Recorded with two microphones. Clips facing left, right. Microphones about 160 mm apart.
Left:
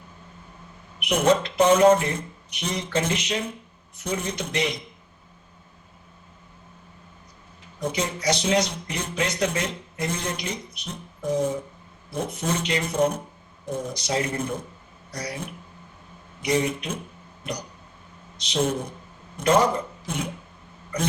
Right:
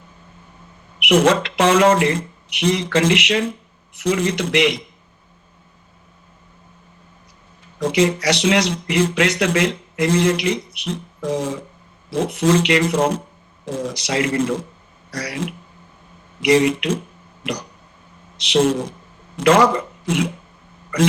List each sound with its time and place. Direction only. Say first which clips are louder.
0.9 s speech: right 5 dB; 85° right
7.8 s speech: right 10 dB; 90° right
17.4 s throat clearing: right 6 dB; 90° right
18.3 s a man's voice: right 8 dB; 85° right